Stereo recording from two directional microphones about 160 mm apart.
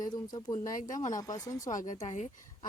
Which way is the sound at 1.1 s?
20° left (ahead or behind).